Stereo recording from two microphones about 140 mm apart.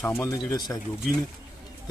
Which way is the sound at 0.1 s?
25° left (ahead or behind).